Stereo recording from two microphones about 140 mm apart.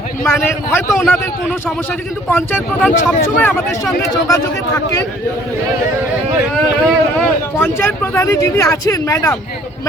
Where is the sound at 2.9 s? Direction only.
75° left (ahead or behind).